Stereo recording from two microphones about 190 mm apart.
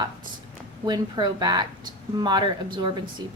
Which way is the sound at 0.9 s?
20° right (ahead or behind).